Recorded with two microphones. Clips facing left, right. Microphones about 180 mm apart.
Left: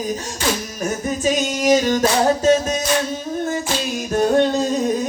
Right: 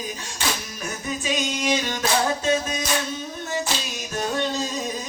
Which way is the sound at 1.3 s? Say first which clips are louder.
Left 8 dB; 45° left (ahead or behind).